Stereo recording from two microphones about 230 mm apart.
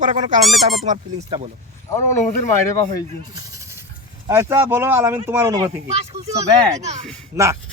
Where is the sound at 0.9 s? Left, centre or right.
Right.